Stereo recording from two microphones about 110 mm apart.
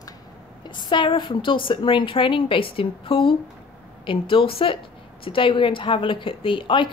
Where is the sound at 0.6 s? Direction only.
45° left (ahead or behind).